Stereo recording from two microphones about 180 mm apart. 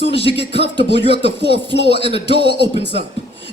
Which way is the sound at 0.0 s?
30° left (ahead or behind).